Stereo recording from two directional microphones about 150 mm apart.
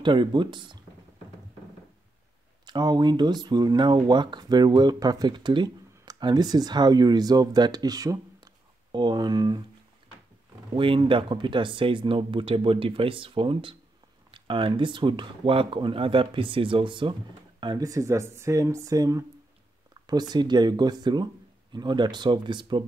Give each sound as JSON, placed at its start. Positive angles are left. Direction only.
{"t": 0.0, "sound": "speech", "side_deg": -30}
{"t": 2.6, "sound": "speech", "side_deg": -30}
{"t": 10.7, "sound": "speech", "side_deg": -35}